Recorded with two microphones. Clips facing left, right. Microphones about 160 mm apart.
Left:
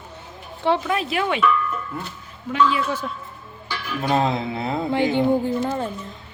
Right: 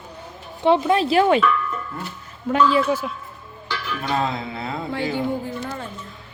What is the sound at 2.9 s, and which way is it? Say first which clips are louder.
Speech: right 4 dB; 10° right (ahead or behind).